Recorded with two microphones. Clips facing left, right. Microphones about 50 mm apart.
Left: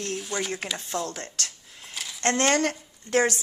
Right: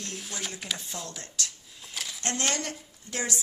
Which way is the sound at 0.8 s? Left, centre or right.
Left.